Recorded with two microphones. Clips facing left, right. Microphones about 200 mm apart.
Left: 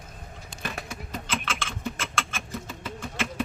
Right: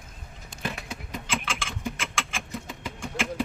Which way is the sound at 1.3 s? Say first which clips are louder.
Right 1 dB; 10° right (ahead or behind).